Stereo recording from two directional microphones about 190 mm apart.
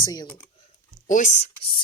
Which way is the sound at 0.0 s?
20° left (ahead or behind).